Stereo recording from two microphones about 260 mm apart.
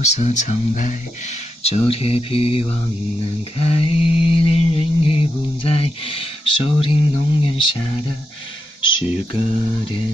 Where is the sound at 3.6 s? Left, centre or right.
Left.